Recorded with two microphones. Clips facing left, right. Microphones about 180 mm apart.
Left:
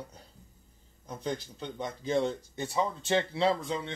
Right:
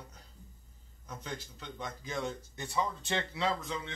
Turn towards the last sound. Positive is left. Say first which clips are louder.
# left 6 dB
turn(degrees=30)  # may be behind; listen again after turning